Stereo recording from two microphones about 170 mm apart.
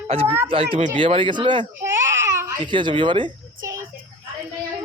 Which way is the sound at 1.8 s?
15° right (ahead or behind).